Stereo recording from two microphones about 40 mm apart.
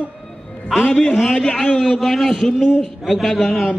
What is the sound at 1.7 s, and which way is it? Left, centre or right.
A man's voice, centre.